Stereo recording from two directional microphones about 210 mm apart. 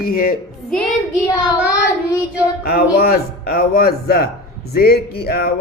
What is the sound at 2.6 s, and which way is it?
Speech, 45° left (ahead or behind).